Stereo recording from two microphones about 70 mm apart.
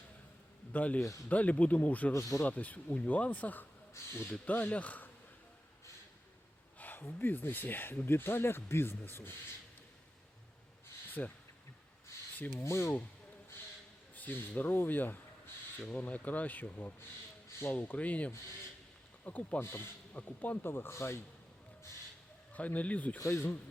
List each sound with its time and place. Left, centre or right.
0.7 s speech: left
2.1 s speech: left
2.4 s speech: left
3.9 s speech: left
4.4 s speech: left
6.7 s a sound: left
7.0 s speech: left
11.2 s speech: left
12.6 s speech: left
14.2 s speech: left
19.6 s speech: left
20.1 s speech: left
22.5 s speech: left
23.2 s speech: left